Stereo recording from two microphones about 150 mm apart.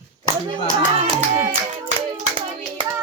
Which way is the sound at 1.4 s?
50° right (ahead or behind).